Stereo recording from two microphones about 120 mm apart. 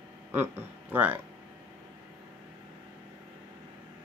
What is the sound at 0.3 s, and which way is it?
Speech, 15° right (ahead or behind).